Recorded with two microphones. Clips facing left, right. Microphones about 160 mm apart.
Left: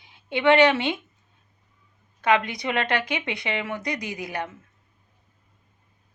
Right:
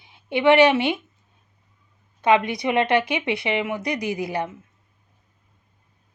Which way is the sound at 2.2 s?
20° right (ahead or behind).